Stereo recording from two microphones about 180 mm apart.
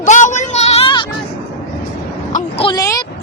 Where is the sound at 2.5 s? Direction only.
25° left (ahead or behind).